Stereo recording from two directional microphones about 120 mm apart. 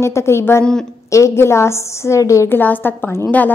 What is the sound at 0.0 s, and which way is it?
A woman's voice, 20° left (ahead or behind).